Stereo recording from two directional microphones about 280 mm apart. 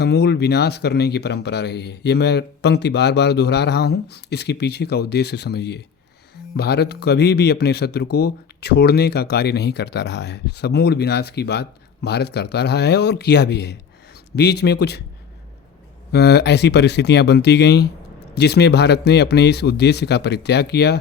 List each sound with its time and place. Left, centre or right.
0.0 s speech: left
16.1 s speech: left